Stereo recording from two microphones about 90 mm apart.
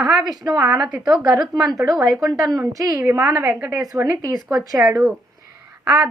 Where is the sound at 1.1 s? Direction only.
45° right (ahead or behind).